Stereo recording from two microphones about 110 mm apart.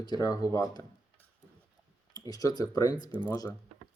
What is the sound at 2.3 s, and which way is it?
Speech, 35° left (ahead or behind).